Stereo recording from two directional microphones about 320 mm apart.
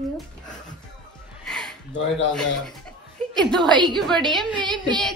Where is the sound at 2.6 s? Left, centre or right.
Centre.